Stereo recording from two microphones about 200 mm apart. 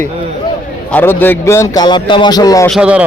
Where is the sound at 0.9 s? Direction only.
10° left (ahead or behind).